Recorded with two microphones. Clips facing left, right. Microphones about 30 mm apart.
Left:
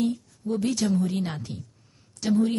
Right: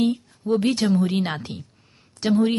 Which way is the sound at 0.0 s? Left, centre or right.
Right.